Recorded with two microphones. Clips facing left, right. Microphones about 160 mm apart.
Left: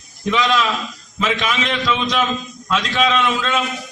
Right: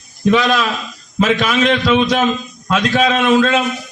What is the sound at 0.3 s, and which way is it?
A man's voice, 40° right (ahead or behind).